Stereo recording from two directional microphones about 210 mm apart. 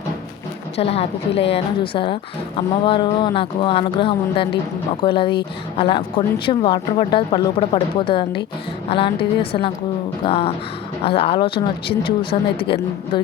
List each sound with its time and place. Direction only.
0.8 s speech: 30° left (ahead or behind)